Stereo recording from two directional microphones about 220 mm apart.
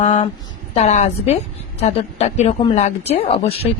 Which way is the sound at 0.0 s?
30° left (ahead or behind).